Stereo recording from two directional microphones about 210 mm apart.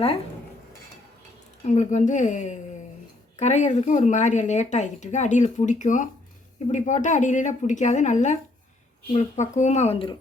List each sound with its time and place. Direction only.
1.6 s a woman's voice: 35° left (ahead or behind)